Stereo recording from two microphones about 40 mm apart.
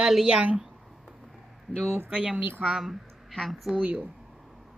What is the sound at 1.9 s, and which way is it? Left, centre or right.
Speech, right.